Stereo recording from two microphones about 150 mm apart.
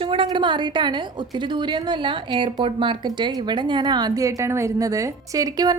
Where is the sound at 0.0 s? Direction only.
35° right (ahead or behind).